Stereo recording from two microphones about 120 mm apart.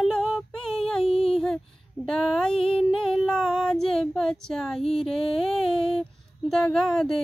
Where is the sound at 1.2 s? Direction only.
5° left (ahead or behind).